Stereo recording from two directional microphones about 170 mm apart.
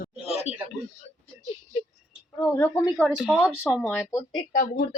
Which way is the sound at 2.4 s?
15° left (ahead or behind).